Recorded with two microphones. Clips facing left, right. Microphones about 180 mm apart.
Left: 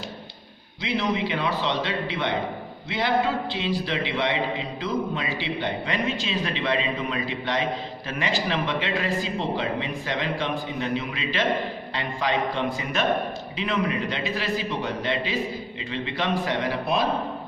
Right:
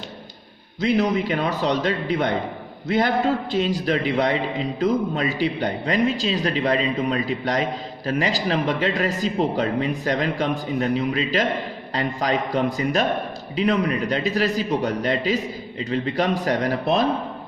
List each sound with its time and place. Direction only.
0.8 s a man's voice: 45° right (ahead or behind)
3.5 s a man's voice: 45° right (ahead or behind)